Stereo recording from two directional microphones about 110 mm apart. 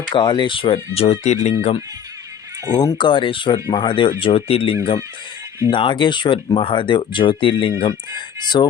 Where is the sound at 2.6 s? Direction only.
40° left (ahead or behind); by 4.7 s 60° left (ahead or behind).